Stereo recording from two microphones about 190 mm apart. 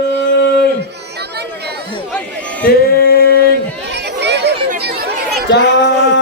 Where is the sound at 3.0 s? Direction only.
55° left (ahead or behind).